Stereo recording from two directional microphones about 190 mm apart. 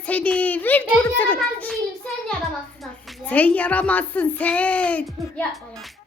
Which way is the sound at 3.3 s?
10° left (ahead or behind).